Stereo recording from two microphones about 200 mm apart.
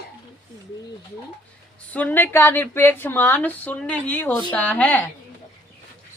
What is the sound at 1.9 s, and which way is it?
Speech, 10° left (ahead or behind).